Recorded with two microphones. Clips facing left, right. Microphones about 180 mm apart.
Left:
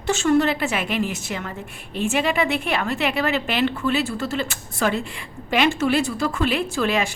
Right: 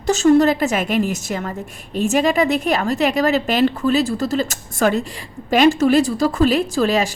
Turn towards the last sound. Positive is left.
turn(degrees=-35)  # may be behind; listen again after turning